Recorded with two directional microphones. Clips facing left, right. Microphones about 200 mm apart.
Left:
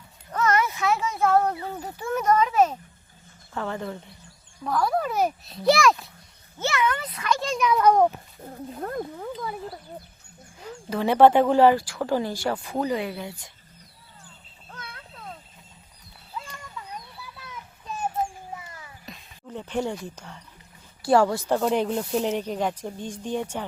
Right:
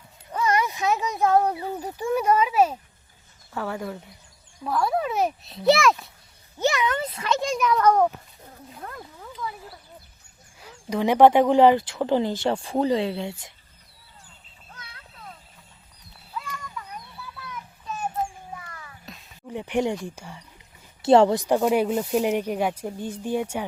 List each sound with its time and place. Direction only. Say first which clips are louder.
0.3 s a sound: even; 10° right (ahead or behind)
3.5 s a child's voice: even; 10° right (ahead or behind)
6.6 s a child's voice: right 2 dB; 15° right (ahead or behind)
7.4 s speech: right 1 dB; 10° right (ahead or behind)
7.7 s a child's voice: left 1 dB; 10° left (ahead or behind)
8.4 s speech: left 8 dB; 40° left (ahead or behind)
10.6 s a child's voice: right 2 dB; 15° right (ahead or behind)
14.7 s a sound: left 5 dB; 55° left (ahead or behind)
16.3 s a sound: right 3 dB; 25° left (ahead or behind)
18.5 s music: left 1 dB; 20° left (ahead or behind)
19.1 s a sound: left 1 dB; centre (ahead or behind)
19.5 s speech: right 4 dB; 15° right (ahead or behind)
21.0 s speech: right 4 dB; 25° right (ahead or behind)